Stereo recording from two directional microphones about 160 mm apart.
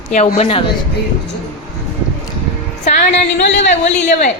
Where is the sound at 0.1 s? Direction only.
45° left (ahead or behind).